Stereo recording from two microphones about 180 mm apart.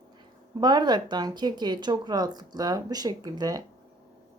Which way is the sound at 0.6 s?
25° right (ahead or behind).